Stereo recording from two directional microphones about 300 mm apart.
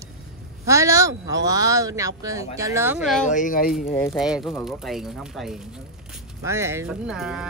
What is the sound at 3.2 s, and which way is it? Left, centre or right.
Speech, left.